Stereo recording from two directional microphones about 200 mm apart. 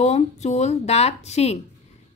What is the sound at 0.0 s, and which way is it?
Speech, 35° left (ahead or behind).